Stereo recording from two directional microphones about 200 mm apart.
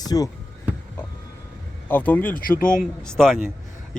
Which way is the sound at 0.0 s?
20° left (ahead or behind).